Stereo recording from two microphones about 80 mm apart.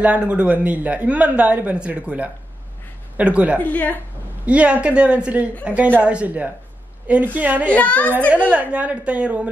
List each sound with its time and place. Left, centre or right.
0.0 s speech: centre
3.5 s a woman's voice: centre
4.5 s a woman's voice: centre
7.7 s a woman's voice: centre
8.3 s speech: centre